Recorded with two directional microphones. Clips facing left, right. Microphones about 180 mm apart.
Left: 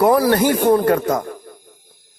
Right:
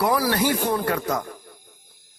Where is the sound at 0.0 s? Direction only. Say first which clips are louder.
Left 7 dB; 50° left (ahead or behind).